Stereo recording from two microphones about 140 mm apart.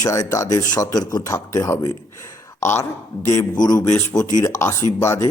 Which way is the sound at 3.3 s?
30° left (ahead or behind).